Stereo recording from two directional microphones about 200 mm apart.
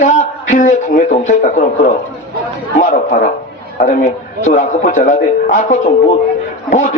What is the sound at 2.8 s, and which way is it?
A man's voice, 40° left (ahead or behind).